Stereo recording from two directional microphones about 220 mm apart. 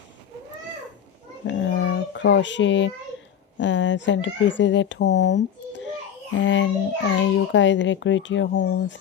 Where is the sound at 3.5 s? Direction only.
55° left (ahead or behind).